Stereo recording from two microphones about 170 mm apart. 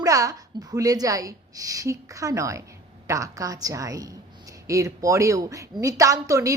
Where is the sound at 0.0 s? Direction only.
20° right (ahead or behind).